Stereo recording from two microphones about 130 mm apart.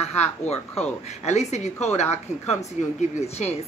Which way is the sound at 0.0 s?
55° left (ahead or behind).